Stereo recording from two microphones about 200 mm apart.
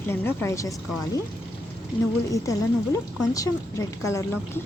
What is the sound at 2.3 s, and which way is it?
Speech, 15° left (ahead or behind).